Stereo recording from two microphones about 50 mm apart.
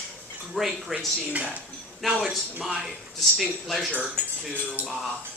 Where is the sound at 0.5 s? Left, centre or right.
Centre.